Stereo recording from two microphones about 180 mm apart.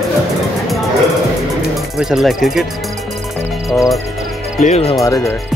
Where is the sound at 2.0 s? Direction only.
Centre (ahead or behind).